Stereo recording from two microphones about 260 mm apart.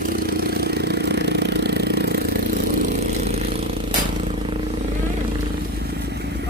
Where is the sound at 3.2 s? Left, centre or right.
Right.